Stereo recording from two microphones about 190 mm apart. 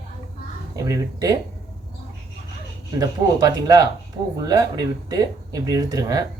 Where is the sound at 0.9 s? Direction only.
15° right (ahead or behind).